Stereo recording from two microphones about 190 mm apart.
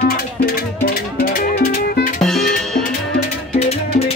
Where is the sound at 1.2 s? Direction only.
55° left (ahead or behind).